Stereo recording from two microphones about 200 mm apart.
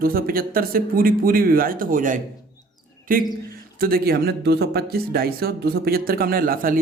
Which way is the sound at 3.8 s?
45° right (ahead or behind).